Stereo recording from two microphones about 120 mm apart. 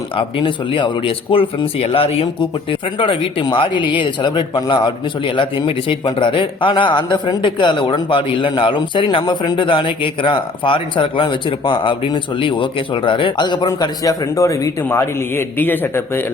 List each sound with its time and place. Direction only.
0.2 s a man's voice: 45° left (ahead or behind); by 16.2 s 15° left (ahead or behind)